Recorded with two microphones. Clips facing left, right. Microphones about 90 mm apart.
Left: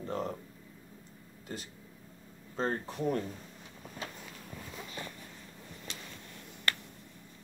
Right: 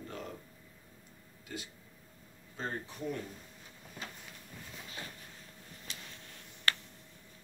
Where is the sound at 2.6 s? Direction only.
45° left (ahead or behind).